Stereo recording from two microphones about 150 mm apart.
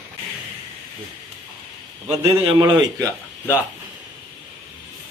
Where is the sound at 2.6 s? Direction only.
25° right (ahead or behind).